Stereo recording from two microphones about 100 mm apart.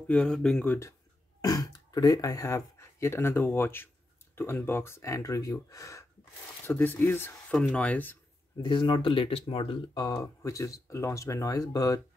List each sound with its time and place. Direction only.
0.0 s speech: 10° left (ahead or behind)
1.4 s speech: 40° left (ahead or behind)
6.6 s speech: 20° left (ahead or behind)
8.6 s speech: 50° left (ahead or behind)
10.2 s speech: 30° left (ahead or behind)